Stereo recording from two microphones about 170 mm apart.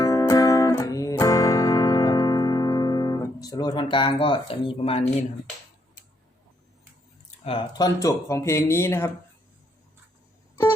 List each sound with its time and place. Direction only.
0.0 s music: 20° left (ahead or behind)
7.3 s speech: 35° left (ahead or behind); by 9.0 s 15° left (ahead or behind)